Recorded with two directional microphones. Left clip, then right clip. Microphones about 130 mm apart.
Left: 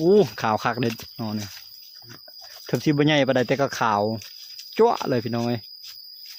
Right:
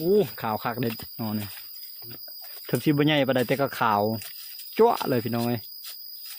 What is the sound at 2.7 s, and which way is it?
Speech, 10° left (ahead or behind).